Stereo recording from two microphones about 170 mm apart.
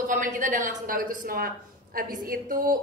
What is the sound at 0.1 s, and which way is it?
A man's voice, 50° right (ahead or behind).